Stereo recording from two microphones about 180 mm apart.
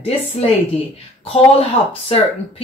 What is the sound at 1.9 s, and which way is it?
Speech, 30° left (ahead or behind).